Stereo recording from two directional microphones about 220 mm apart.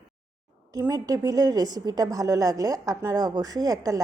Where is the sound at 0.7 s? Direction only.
15° right (ahead or behind).